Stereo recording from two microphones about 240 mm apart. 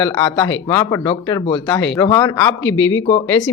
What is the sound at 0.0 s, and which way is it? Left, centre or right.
Speech, centre.